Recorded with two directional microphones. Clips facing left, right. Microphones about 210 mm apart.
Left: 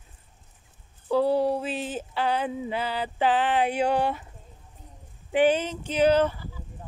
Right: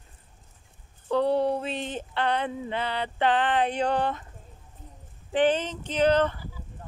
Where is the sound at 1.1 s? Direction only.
5° left (ahead or behind).